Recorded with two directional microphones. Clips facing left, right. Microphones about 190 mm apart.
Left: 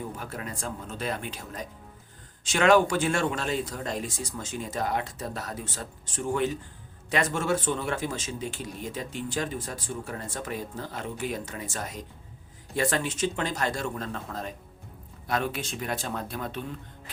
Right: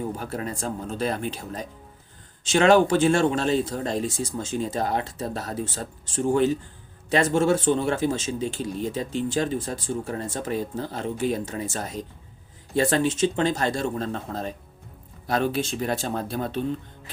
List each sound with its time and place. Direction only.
0.2 s a man's voice: 30° right (ahead or behind)